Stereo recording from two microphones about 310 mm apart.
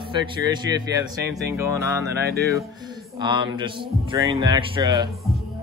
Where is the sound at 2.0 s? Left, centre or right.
Right.